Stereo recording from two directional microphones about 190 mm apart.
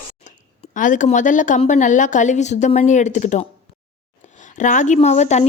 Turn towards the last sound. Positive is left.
turn(degrees=35)  # may be behind; listen again after turning